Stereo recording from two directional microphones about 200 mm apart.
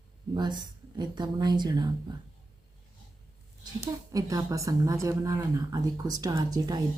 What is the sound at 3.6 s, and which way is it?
A woman's voice, 15° right (ahead or behind).